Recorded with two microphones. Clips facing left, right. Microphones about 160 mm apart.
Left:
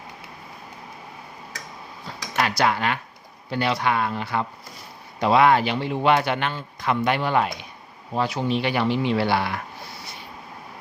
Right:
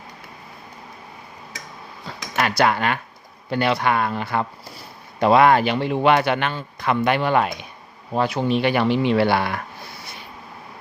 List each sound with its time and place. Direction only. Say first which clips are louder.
2.4 s speech: right 2 dB; 55° right (ahead or behind)